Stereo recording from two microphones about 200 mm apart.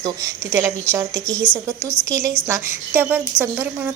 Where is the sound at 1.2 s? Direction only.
5° left (ahead or behind).